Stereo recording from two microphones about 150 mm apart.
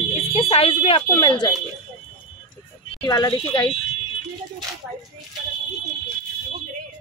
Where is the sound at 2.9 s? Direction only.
25° left (ahead or behind).